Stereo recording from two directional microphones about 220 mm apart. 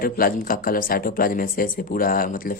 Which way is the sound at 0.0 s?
40° left (ahead or behind).